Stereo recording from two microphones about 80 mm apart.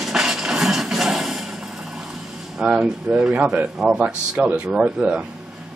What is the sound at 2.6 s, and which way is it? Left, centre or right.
Speech, centre.